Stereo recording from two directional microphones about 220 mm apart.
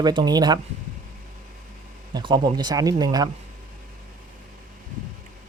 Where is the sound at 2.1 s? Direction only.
20° right (ahead or behind).